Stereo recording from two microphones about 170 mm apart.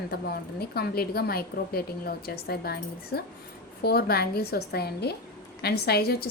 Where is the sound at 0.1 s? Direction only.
70° left (ahead or behind).